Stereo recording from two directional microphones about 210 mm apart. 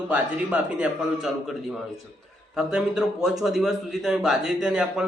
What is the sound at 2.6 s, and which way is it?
A man's voice, 5° right (ahead or behind).